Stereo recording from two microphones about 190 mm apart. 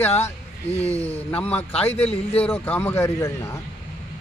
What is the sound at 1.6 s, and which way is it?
Speech, 30° left (ahead or behind).